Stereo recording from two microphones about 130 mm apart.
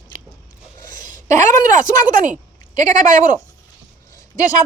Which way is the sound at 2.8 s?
70° right (ahead or behind).